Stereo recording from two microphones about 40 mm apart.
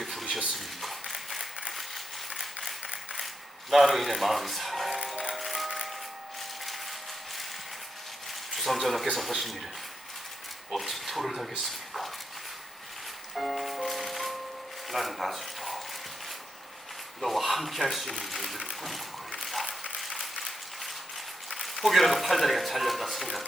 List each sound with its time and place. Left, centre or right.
0.0 s a sound: centre
2.3 s mechanisms: centre
2.8 s a sound: right
3.7 s speech: centre
5.3 s music: centre
8.5 s speech: centre
10.8 s speech: centre
13.3 s music: centre
14.8 s a sound: centre
17.2 s speech: centre
19.4 s a sound: centre
20.0 s applause: centre
21.5 s speech: centre